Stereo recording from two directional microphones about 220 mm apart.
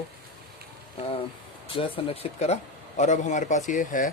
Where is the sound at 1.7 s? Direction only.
25° left (ahead or behind).